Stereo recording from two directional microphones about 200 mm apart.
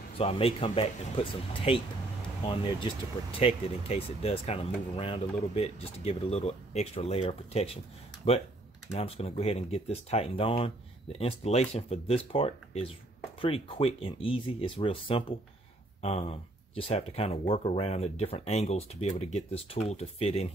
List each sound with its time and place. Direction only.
0.2 s speech: 30° left (ahead or behind)
8.9 s speech: 30° left (ahead or behind)